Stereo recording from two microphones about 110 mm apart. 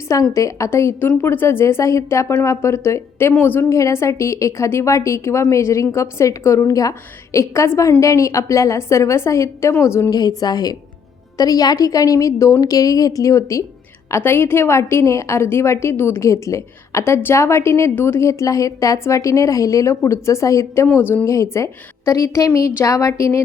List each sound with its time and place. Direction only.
0.1 s a woman's voice: 30° left (ahead or behind)
10.2 s a woman's voice: 35° left (ahead or behind)